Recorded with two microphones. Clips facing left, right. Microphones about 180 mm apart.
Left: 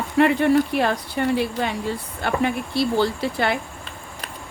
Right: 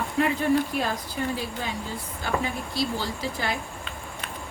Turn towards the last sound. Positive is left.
turn(degrees=65)  # may be behind; listen again after turning